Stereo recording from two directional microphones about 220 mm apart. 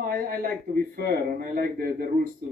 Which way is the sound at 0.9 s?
40° right (ahead or behind).